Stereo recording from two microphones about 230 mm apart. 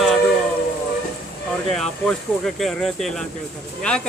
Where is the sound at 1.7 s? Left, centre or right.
Centre.